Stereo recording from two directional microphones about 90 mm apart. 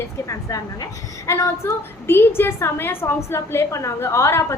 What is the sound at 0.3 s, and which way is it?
A woman's voice, 40° left (ahead or behind).